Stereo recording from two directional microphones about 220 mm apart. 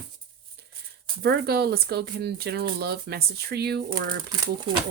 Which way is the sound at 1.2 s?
45° right (ahead or behind).